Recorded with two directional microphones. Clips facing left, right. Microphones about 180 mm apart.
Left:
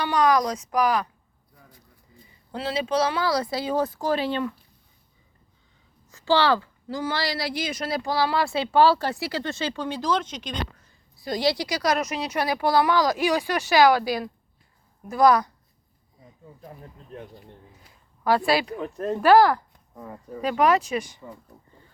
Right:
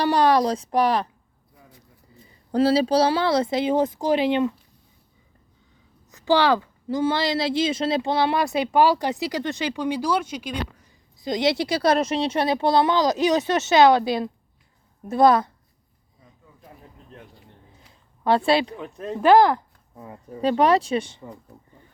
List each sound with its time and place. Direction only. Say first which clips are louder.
0.0 s speech: right 3 dB; 35° right (ahead or behind)
2.5 s speech: right 8 dB; 40° right (ahead or behind); by 4.5 s 20° right (ahead or behind)
6.1 s a woman's voice: right 2 dB; 20° right (ahead or behind)
11.2 s speech: right 2 dB; 20° right (ahead or behind)
18.2 s speech: right 2 dB; 25° right (ahead or behind)
18.8 s speech: left 4 dB; centre (ahead or behind)
19.2 s speech: right 1 dB; 20° right (ahead or behind)